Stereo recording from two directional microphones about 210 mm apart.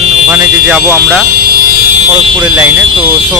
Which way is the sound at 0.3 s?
10° right (ahead or behind).